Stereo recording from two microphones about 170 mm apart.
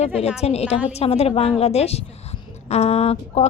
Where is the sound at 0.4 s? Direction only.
40° left (ahead or behind).